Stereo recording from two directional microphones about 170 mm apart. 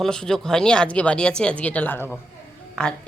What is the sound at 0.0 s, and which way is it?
Speech, 5° left (ahead or behind).